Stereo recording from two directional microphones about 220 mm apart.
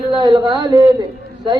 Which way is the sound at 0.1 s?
20° right (ahead or behind).